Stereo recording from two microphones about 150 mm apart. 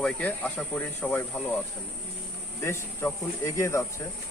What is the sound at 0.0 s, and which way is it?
Speech, 10° left (ahead or behind).